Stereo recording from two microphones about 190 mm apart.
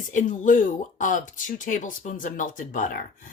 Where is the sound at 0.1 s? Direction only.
40° left (ahead or behind).